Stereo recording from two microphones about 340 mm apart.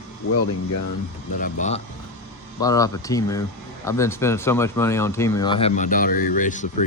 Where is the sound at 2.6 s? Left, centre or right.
Centre.